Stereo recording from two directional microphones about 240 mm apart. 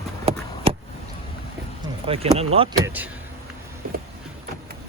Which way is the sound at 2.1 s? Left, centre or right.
Right.